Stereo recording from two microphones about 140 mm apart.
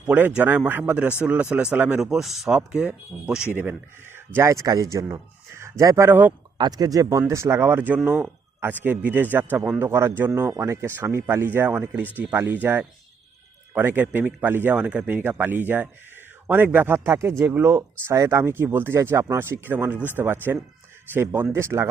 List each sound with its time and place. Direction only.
0.0 s a man's voice: 10° right (ahead or behind)
6.6 s a man's voice: 30° right (ahead or behind)